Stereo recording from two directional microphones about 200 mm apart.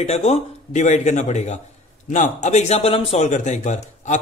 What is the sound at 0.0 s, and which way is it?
Speech, 35° left (ahead or behind).